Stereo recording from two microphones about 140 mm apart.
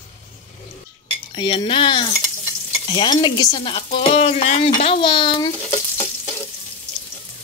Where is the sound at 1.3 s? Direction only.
35° left (ahead or behind).